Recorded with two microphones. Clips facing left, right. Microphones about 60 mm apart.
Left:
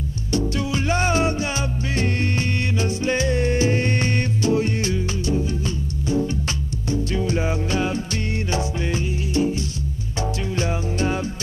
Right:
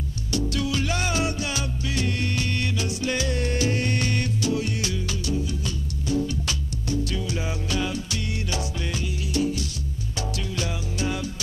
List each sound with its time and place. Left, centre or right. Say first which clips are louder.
0.3 s music: left 3 dB; left